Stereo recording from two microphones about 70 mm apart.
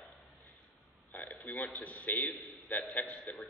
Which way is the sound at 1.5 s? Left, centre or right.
Left.